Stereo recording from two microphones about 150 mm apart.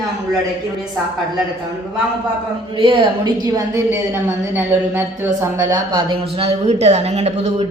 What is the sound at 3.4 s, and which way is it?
A woman's voice, 25° right (ahead or behind).